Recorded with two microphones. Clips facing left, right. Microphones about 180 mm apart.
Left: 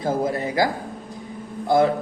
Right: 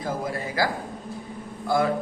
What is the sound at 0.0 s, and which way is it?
A man's voice, 25° left (ahead or behind).